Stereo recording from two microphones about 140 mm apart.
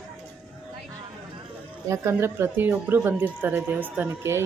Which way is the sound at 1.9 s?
20° right (ahead or behind).